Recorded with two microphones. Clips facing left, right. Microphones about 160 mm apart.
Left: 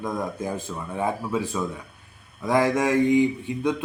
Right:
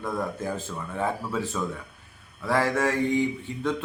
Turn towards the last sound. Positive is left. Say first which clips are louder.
# left 3 dB
turn(degrees=15)  # may be behind; listen again after turning